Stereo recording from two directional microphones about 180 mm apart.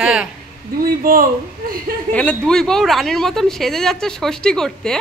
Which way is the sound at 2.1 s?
5° left (ahead or behind).